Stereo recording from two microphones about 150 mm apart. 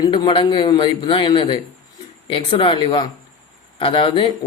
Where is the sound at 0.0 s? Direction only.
30° left (ahead or behind).